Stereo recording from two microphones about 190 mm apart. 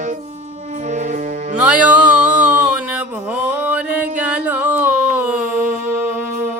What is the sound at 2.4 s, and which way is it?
Mantra, 5° right (ahead or behind).